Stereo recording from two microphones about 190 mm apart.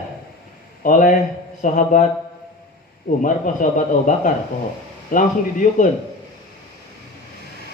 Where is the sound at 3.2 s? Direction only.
40° left (ahead or behind).